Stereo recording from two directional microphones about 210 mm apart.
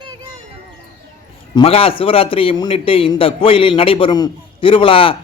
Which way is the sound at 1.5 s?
25° left (ahead or behind).